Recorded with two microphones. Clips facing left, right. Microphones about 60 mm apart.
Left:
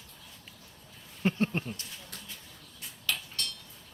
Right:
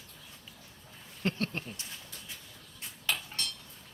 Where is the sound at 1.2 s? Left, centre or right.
Centre.